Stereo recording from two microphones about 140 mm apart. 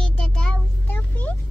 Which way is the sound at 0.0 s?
10° left (ahead or behind).